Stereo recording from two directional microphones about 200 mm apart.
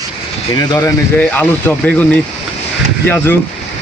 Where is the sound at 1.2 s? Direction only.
5° left (ahead or behind).